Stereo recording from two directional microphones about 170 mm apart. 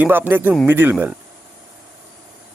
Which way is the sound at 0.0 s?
10° right (ahead or behind).